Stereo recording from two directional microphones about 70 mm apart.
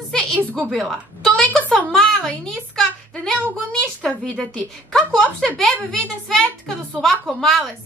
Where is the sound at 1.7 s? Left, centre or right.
Centre.